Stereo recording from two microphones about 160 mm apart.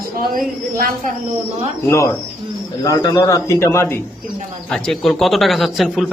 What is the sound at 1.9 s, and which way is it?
Speech, 15° left (ahead or behind).